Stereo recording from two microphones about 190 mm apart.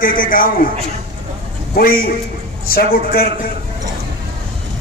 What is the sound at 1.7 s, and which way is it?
A man's voice, 50° left (ahead or behind).